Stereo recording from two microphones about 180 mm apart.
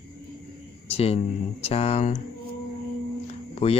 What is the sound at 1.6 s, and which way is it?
Speech, 35° left (ahead or behind).